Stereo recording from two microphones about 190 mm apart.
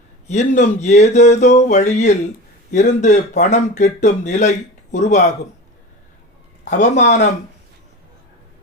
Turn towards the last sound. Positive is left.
turn(degrees=40)  # may be behind; listen again after turning